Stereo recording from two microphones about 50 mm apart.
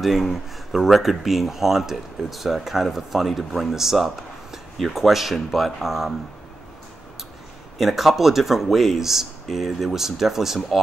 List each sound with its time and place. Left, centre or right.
0.0 s speech: centre
7.8 s speech: centre